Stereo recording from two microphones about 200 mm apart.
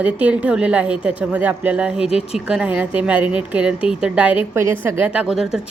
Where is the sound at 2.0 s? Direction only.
30° left (ahead or behind).